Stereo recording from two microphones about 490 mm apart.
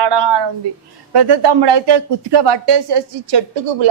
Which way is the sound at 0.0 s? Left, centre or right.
Right.